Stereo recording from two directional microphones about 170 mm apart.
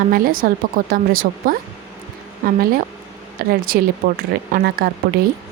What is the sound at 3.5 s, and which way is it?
Speech, 60° right (ahead or behind).